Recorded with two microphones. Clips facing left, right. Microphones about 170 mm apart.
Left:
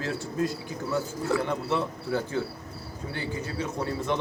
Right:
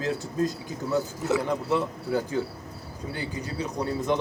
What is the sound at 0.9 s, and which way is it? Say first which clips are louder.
A man's voice: right 2 dB; 15° right (ahead or behind).